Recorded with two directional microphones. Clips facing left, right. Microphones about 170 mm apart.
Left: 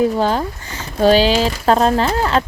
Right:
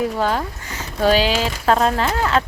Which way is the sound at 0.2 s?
30° left (ahead or behind).